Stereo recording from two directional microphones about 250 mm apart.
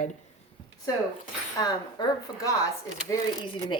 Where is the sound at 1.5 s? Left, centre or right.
Centre.